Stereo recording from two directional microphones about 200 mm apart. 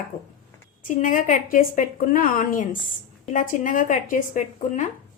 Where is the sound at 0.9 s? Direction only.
40° left (ahead or behind).